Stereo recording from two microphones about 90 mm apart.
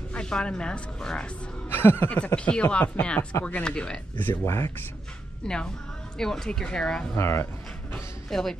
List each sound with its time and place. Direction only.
0.1 s speech: 10° left (ahead or behind)
1.7 s speech: 25° left (ahead or behind)
4.2 s speech: 25° left (ahead or behind)
5.4 s speech: 10° left (ahead or behind)
7.2 s speech: 30° left (ahead or behind)
8.3 s speech: 5° left (ahead or behind)